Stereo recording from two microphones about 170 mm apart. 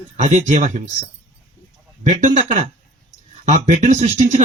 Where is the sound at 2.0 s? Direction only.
45° right (ahead or behind).